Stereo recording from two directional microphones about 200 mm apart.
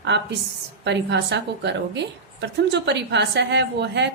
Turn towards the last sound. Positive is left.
turn(degrees=-60)  # may be behind; listen again after turning